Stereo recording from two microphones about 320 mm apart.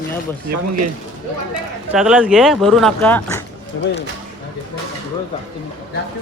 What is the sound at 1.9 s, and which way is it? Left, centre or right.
Speech, centre.